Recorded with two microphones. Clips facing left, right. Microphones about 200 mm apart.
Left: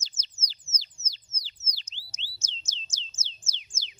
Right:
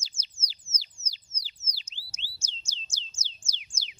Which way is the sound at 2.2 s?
10° right (ahead or behind).